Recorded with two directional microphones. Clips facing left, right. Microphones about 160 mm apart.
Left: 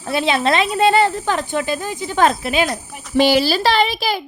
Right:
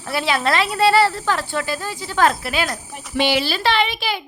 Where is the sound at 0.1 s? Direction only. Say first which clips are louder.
Left 3 dB; 20° left (ahead or behind).